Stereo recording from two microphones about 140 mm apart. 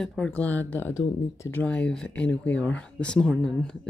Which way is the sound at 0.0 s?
5° left (ahead or behind).